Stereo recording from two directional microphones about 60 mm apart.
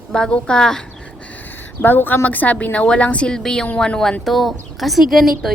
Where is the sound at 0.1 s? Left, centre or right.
Centre.